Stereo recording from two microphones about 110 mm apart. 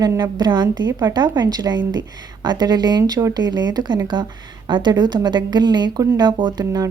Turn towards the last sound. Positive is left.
turn(degrees=-35)  # may be behind; listen again after turning